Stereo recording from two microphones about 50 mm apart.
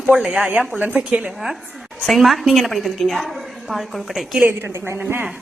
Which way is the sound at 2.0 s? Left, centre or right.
Centre.